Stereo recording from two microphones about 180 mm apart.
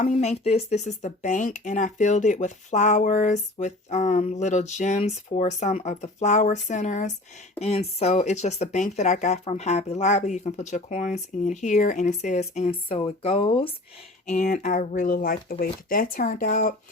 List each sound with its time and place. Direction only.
0.0 s speech: 40° left (ahead or behind)
14.3 s speech: 40° left (ahead or behind)